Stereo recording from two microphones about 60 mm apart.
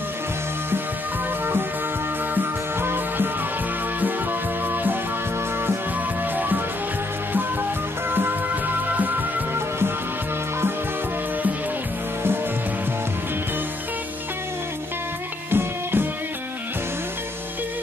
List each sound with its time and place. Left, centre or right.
2.3 s music: right
8.1 s music: right
15.5 s music: right